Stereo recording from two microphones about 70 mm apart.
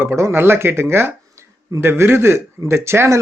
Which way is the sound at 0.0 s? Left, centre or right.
Right.